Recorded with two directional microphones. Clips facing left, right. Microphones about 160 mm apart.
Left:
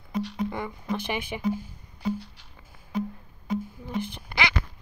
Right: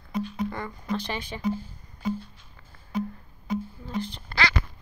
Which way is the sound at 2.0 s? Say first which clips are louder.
Even; 80° left.